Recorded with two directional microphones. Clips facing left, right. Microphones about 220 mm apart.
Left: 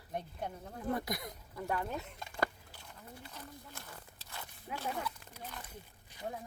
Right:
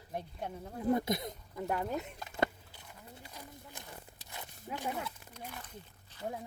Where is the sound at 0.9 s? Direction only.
20° right (ahead or behind).